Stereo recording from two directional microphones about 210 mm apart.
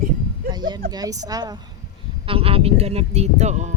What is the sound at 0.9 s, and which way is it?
A woman's voice, 20° right (ahead or behind).